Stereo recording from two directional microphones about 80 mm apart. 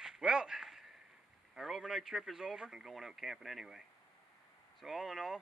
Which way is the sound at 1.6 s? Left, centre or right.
Centre.